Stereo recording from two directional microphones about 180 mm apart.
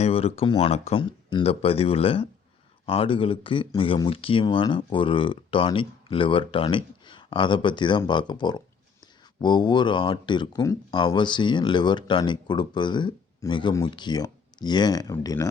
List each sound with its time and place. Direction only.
0.0 s speech: 35° left (ahead or behind); by 15.4 s 20° left (ahead or behind)